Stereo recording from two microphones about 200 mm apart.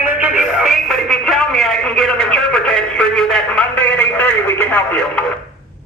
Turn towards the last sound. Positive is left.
turn(degrees=5)  # may be behind; listen again after turning